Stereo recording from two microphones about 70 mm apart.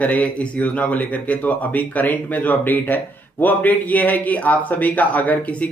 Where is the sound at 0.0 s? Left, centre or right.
Centre.